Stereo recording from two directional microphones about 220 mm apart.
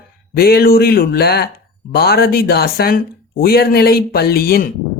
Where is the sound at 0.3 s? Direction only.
45° left (ahead or behind).